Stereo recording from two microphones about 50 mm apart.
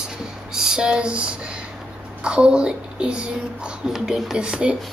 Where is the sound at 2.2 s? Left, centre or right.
Centre.